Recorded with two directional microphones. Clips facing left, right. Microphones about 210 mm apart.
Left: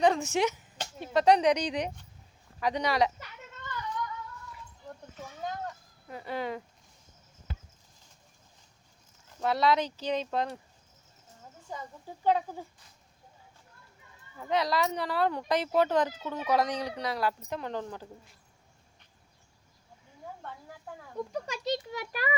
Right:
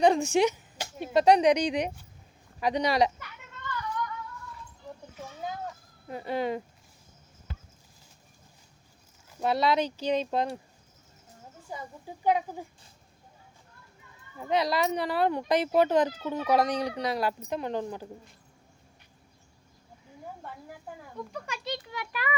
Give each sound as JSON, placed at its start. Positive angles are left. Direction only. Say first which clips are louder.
{"t": 0.0, "sound": "speech", "louder": "right 3 dB", "side_deg": -15}
{"t": 5.1, "sound": "a sound", "louder": "even", "side_deg": -5}
{"t": 6.1, "sound": "speech", "louder": "right 5 dB", "side_deg": -20}
{"t": 9.4, "sound": "speech", "louder": "right 1 dB", "side_deg": -15}
{"t": 11.7, "sound": "speech", "louder": "right 1 dB", "side_deg": -10}
{"t": 14.3, "sound": "speech", "louder": "right 2 dB", "side_deg": -15}
{"t": 21.3, "sound": "a child's voice", "louder": "left 4 dB", "side_deg": 40}